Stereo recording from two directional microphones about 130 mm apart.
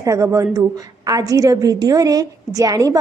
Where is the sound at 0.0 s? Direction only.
25° right (ahead or behind).